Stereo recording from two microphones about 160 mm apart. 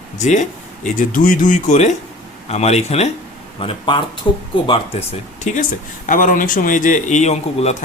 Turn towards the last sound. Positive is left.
turn(degrees=45)  # may be behind; listen again after turning